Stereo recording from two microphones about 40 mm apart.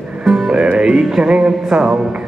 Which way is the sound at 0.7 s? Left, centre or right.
Right.